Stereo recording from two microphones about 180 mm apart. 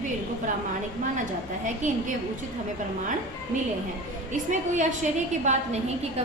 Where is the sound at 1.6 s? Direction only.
45° right (ahead or behind).